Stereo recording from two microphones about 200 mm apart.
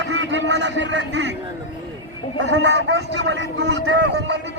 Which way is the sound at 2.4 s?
60° right (ahead or behind).